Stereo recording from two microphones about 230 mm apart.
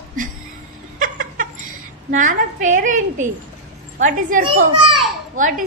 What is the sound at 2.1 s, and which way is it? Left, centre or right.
A woman's voice, right.